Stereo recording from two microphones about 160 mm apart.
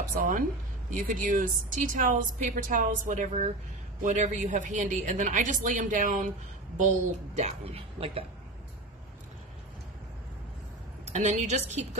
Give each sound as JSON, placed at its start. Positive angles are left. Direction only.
{"t": 0.2, "sound": "speech", "side_deg": -60}
{"t": 7.3, "sound": "speech", "side_deg": -40}
{"t": 11.1, "sound": "speech", "side_deg": -45}